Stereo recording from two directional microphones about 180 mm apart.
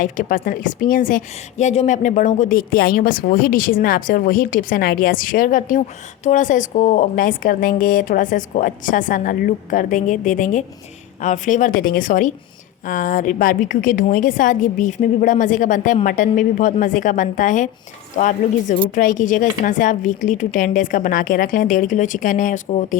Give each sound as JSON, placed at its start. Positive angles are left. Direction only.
{"t": 0.0, "sound": "speech", "side_deg": 50}